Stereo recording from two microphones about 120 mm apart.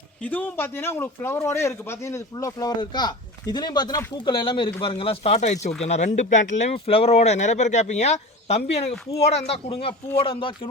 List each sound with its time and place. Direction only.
0.2 s a man's voice: 15° left (ahead or behind); by 5.7 s 70° left (ahead or behind)
5.8 s speech: 80° left; by 10.7 s 50° left (ahead or behind)